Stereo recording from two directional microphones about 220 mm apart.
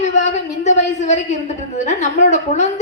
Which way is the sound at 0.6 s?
30° left (ahead or behind).